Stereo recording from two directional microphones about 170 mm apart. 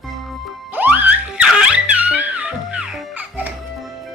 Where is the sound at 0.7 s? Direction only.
10° right (ahead or behind).